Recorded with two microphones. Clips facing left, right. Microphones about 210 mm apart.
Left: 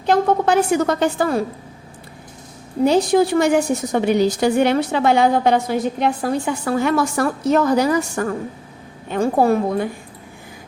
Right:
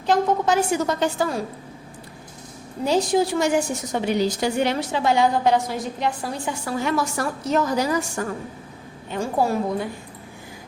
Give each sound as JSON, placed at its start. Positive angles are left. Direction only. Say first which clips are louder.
{"t": 0.0, "sound": "a woman's voice", "louder": "left 4 dB", "side_deg": 60}
{"t": 2.8, "sound": "a woman's voice", "louder": "left 5 dB", "side_deg": 60}